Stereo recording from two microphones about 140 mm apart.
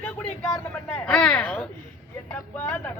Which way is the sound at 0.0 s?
15° left (ahead or behind).